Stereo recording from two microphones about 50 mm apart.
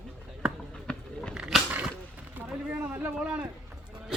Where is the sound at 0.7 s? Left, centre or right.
Centre.